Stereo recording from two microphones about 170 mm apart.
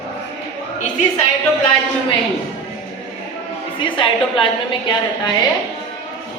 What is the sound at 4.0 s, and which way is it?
Speech, 30° left (ahead or behind).